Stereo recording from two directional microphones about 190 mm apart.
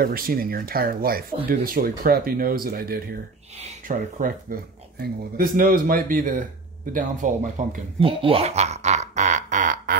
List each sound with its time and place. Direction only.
0.0 s speech: 50° right (ahead or behind)
3.5 s speech: 40° right (ahead or behind)
8.0 s a sound: 30° right (ahead or behind)